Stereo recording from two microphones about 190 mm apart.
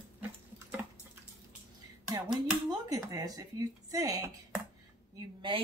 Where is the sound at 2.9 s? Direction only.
20° right (ahead or behind).